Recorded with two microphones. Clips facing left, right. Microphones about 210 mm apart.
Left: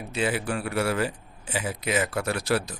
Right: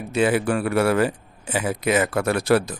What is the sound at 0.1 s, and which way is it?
A man's voice, 55° right (ahead or behind).